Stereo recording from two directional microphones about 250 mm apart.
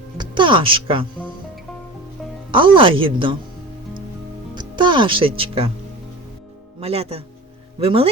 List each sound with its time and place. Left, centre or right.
0.2 s speech: centre
2.5 s speech: centre
4.5 s speech: centre
6.7 s speech: right